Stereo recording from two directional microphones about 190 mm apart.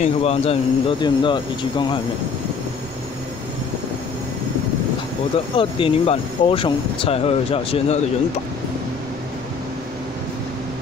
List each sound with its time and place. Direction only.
0.0 s speech: 30° left (ahead or behind)
5.6 s speech: 30° left (ahead or behind)